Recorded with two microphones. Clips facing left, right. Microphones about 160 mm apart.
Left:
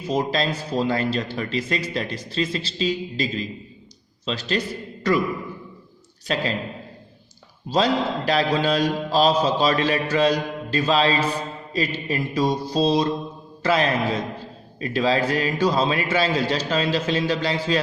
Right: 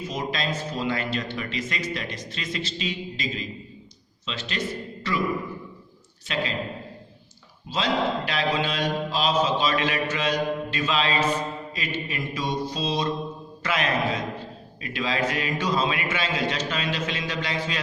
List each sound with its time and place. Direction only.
0.1 s a man's voice: 35° left (ahead or behind)
6.2 s a man's voice: 40° left (ahead or behind)
7.7 s a man's voice: 40° left (ahead or behind)